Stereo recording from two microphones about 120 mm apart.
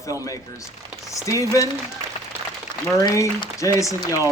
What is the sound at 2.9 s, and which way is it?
Speech, 30° left (ahead or behind).